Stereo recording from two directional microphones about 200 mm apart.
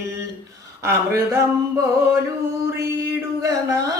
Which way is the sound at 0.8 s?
15° right (ahead or behind).